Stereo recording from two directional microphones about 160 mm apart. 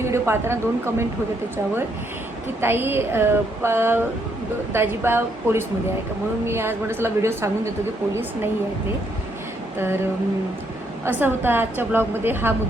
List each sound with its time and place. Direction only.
0.0 s a woman's voice: 15° right (ahead or behind)
2.6 s a woman's voice: 15° right (ahead or behind)
9.7 s a woman's voice: 15° right (ahead or behind)
11.0 s a woman's voice: 10° right (ahead or behind)